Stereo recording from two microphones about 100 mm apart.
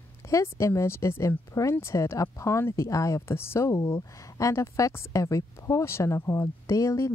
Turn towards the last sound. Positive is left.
turn(degrees=30)  # may be behind; listen again after turning